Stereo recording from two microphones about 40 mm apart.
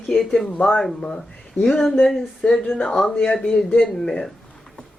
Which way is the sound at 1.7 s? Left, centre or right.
Centre.